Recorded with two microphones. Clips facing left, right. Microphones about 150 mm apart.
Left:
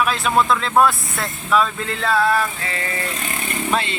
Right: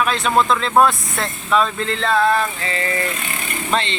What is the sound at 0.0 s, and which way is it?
Speech, 5° left (ahead or behind).